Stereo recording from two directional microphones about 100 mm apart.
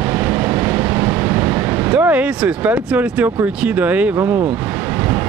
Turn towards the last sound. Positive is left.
turn(degrees=-20)  # may be behind; listen again after turning